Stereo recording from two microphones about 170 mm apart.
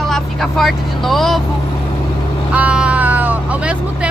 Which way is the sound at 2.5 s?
5° right (ahead or behind).